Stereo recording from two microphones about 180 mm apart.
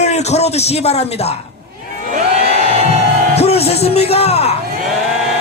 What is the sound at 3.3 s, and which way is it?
A man's voice, 35° left (ahead or behind).